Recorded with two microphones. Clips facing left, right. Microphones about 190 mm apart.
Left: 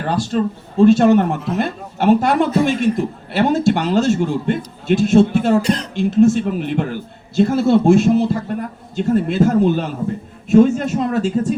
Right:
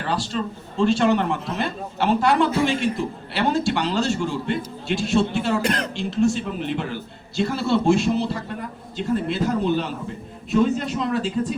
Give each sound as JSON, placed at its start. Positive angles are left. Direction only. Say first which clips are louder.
{"t": 0.0, "sound": "a man's voice", "louder": "left 7 dB", "side_deg": 50}
{"t": 5.6, "sound": "speech", "louder": "left 4 dB", "side_deg": -55}
{"t": 5.9, "sound": "a man's voice", "louder": "left 11 dB", "side_deg": 55}